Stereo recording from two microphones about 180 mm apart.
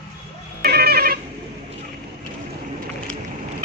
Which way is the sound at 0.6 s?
60° right (ahead or behind).